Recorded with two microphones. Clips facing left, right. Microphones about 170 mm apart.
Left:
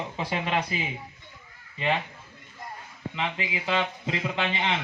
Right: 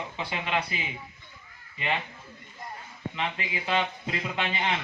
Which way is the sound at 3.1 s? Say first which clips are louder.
Left 2 dB; 25° left (ahead or behind).